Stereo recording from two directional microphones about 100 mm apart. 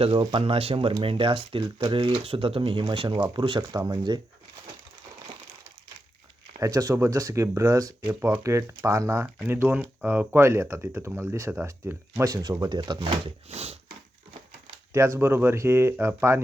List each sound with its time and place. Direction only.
0.2 s speech: 50° right (ahead or behind)
0.4 s speech: 70° right (ahead or behind); by 3.6 s 55° right (ahead or behind)
3.6 s speech: 35° right (ahead or behind)
6.6 s speech: 35° right (ahead or behind)
9.5 s speech: 20° right (ahead or behind); by 13.3 s 55° right (ahead or behind)
13.5 s a sound: 90° right
14.9 s speech: 30° right (ahead or behind)